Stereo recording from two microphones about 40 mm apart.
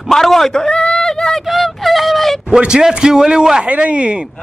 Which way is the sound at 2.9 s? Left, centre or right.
Centre.